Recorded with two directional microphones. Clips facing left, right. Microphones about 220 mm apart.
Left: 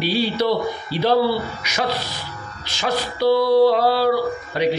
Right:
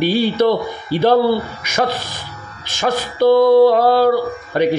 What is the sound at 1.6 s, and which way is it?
A man's voice, 50° right (ahead or behind).